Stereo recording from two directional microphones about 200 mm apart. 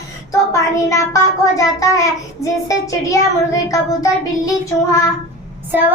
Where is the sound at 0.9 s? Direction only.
15° left (ahead or behind).